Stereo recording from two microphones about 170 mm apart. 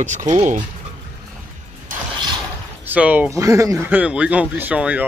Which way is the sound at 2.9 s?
10° right (ahead or behind).